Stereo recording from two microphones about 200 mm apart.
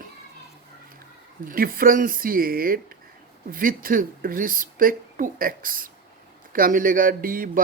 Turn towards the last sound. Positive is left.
turn(degrees=-45)  # may be behind; listen again after turning